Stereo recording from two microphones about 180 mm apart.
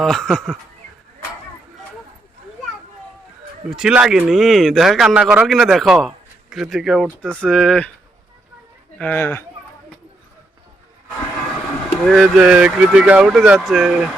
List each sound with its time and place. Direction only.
0.0 s speech: centre (ahead or behind)
3.7 s speech: 5° right (ahead or behind)
9.0 s speech: 10° left (ahead or behind)
12.0 s speech: 5° right (ahead or behind)